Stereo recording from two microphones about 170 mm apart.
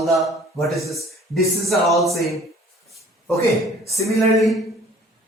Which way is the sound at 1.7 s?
Centre (ahead or behind).